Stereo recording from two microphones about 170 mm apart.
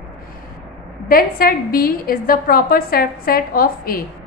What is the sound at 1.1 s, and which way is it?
A woman's voice, 60° left (ahead or behind).